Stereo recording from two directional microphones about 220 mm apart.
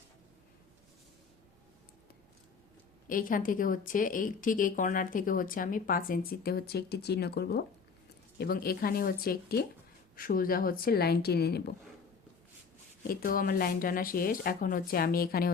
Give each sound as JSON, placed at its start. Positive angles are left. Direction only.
{"t": 3.1, "sound": "a woman's voice", "side_deg": 40}
{"t": 13.1, "sound": "a woman's voice", "side_deg": 40}